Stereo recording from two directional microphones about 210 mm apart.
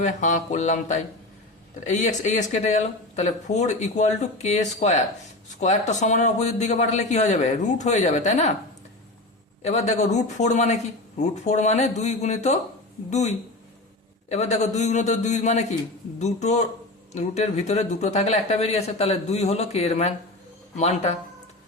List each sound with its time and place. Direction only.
0.0 s speech: 35° left (ahead or behind)
9.6 s speech: 30° left (ahead or behind)